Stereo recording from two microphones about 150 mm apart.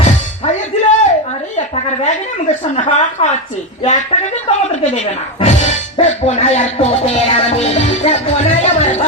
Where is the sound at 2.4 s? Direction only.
50° left (ahead or behind).